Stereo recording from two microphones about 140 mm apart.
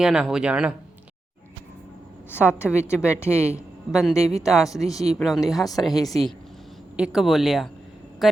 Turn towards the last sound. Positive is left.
turn(degrees=0)  # may be behind; listen again after turning